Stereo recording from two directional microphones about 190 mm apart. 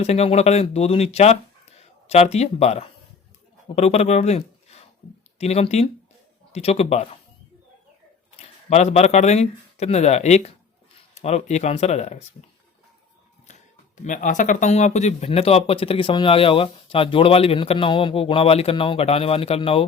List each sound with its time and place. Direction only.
0.0 s speech: 35° left (ahead or behind)
8.4 s speech: 35° left (ahead or behind)
13.5 s speech: 40° left (ahead or behind)